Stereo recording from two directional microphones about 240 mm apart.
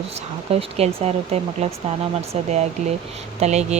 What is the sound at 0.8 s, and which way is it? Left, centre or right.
Speech, right.